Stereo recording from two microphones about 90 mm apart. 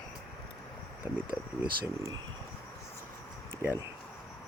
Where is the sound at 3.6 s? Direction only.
25° right (ahead or behind).